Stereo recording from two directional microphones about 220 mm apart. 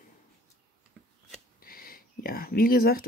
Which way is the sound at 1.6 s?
40° left (ahead or behind).